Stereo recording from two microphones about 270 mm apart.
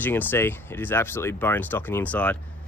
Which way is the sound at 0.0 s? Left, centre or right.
Centre.